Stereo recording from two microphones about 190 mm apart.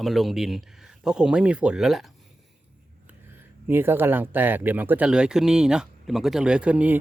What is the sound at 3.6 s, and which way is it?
Speech, 10° right (ahead or behind).